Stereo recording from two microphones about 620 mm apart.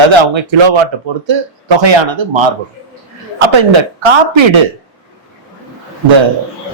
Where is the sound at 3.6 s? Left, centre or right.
Right.